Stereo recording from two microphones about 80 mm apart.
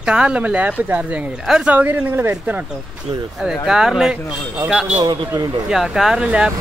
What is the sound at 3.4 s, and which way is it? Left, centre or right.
Speech, centre.